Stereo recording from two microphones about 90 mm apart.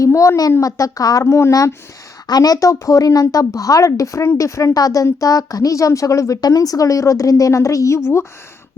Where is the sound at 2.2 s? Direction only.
45° left (ahead or behind); by 8.2 s 30° left (ahead or behind).